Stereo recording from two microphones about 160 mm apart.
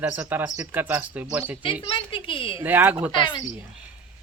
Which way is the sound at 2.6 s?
10° right (ahead or behind).